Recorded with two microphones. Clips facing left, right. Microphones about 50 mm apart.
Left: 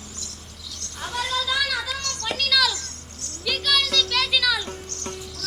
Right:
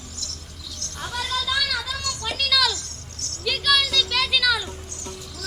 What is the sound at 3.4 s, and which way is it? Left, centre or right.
Music, centre.